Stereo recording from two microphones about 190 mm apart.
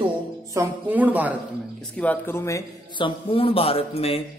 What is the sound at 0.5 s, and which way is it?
Speech, 10° right (ahead or behind).